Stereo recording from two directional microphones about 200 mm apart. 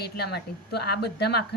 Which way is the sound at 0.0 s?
55° left (ahead or behind).